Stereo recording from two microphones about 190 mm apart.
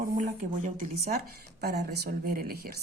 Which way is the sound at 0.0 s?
45° right (ahead or behind).